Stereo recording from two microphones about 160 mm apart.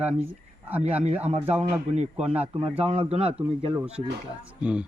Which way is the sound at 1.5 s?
45° right (ahead or behind).